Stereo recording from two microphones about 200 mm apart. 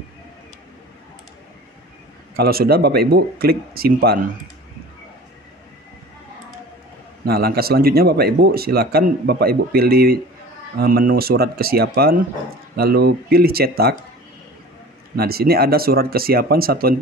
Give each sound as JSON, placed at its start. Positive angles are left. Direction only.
{"t": 2.3, "sound": "speech", "side_deg": -50}
{"t": 7.2, "sound": "speech", "side_deg": -50}
{"t": 15.1, "sound": "speech", "side_deg": -50}